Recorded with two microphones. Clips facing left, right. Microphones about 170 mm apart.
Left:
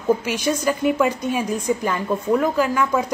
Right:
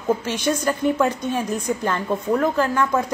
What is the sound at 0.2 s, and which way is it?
A woman's voice, 10° left (ahead or behind).